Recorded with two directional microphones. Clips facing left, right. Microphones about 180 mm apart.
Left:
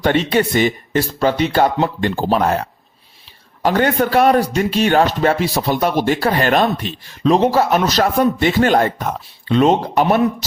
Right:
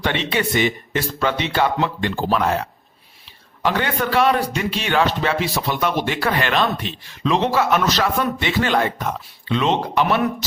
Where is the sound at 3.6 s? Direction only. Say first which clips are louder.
Left 6 dB; 45° left (ahead or behind).